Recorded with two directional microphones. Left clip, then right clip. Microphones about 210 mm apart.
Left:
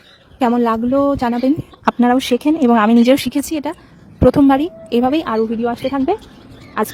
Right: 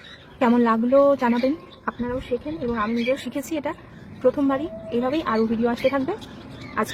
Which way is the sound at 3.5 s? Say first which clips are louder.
Left 5 dB; 40° left (ahead or behind).